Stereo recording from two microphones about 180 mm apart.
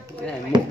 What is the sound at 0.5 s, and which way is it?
Chop, 25° right (ahead or behind).